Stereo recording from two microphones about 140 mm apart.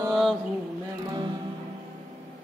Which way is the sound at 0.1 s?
Centre (ahead or behind).